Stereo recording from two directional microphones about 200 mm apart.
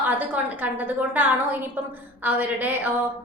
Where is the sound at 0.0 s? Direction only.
10° right (ahead or behind).